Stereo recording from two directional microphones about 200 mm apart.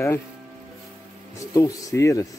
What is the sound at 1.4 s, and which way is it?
Speech, 15° left (ahead or behind).